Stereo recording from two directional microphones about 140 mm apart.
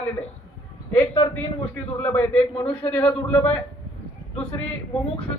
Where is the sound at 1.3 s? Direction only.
15° left (ahead or behind).